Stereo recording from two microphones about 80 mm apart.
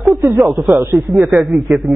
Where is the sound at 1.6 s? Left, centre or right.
Centre.